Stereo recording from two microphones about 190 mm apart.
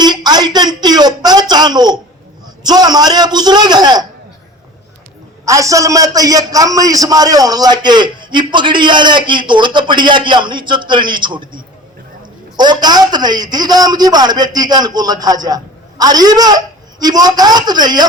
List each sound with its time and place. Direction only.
0.0 s a man's voice: 20° right (ahead or behind)
5.5 s a man's voice: 15° right (ahead or behind)